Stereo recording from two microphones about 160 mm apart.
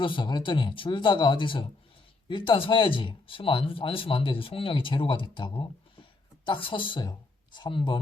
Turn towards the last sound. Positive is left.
turn(degrees=30)  # may be behind; listen again after turning